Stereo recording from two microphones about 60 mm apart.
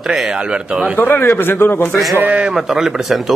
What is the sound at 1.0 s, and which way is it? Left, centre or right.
Speech, left.